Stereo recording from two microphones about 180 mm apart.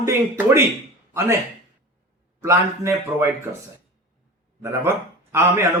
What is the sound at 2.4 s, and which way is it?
Speech, 15° right (ahead or behind).